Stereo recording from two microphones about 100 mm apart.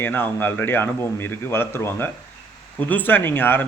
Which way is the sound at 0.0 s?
20° left (ahead or behind).